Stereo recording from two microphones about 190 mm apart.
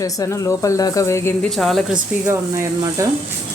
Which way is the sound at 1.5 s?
Centre (ahead or behind).